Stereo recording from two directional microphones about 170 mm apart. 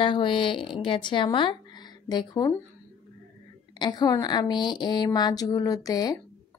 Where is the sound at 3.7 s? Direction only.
25° left (ahead or behind).